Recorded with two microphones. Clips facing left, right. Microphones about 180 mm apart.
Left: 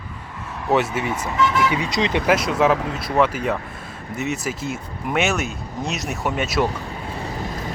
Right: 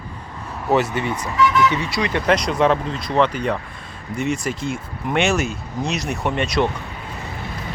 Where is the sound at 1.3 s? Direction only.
25° left (ahead or behind).